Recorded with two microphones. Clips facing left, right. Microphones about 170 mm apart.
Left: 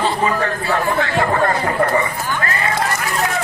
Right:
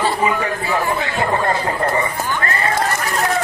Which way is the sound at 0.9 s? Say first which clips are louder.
Left 2 dB; 20° right (ahead or behind).